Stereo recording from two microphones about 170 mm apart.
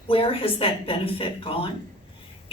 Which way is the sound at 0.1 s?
35° left (ahead or behind).